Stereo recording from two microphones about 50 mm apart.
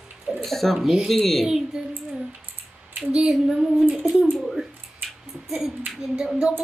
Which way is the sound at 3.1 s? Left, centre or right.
Centre.